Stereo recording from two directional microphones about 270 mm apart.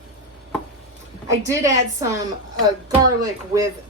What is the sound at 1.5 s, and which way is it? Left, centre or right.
A woman's voice, centre.